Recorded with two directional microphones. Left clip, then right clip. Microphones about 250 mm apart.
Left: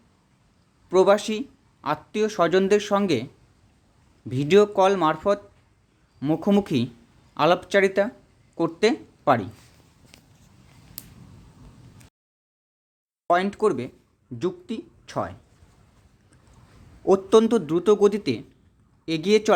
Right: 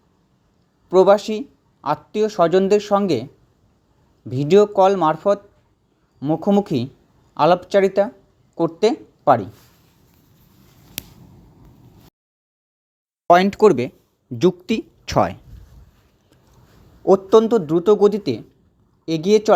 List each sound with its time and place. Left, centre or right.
0.9 s speech: centre
4.3 s speech: centre
13.2 s a woman's voice: right
17.0 s speech: centre